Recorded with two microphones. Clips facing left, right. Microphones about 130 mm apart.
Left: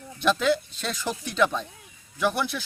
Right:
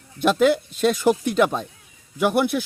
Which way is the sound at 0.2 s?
50° right (ahead or behind).